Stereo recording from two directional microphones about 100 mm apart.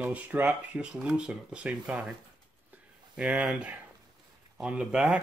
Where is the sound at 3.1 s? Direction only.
10° right (ahead or behind).